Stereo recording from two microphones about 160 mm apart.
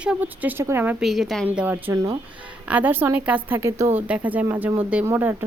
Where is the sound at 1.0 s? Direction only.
Centre (ahead or behind).